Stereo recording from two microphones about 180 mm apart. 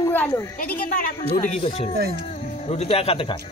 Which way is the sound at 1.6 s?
35° left (ahead or behind).